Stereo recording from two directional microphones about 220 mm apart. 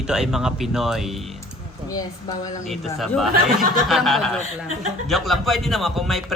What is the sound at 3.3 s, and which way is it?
Speech, 40° right (ahead or behind).